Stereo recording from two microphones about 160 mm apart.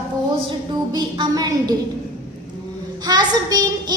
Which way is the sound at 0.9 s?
25° right (ahead or behind).